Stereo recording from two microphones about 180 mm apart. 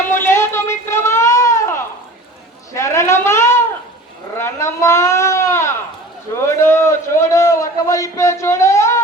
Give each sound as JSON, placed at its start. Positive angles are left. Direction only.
{"t": 0.1, "sound": "a sound", "side_deg": 15}
{"t": 4.4, "sound": "sheep", "side_deg": 15}
{"t": 6.4, "sound": "a man's voice", "side_deg": 15}